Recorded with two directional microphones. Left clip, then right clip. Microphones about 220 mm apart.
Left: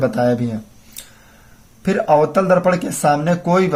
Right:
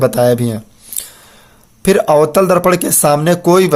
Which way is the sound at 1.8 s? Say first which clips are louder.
Right 5 dB; 45° right (ahead or behind).